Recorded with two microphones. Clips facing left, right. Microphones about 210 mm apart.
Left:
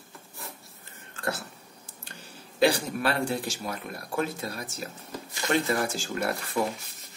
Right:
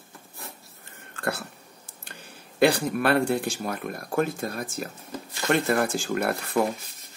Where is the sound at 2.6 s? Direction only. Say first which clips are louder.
Right 3 dB; 55° right (ahead or behind).